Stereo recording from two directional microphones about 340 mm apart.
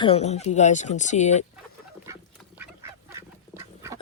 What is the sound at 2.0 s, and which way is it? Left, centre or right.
Duck, centre.